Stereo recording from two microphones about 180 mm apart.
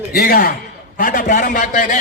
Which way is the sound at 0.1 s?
50° left (ahead or behind).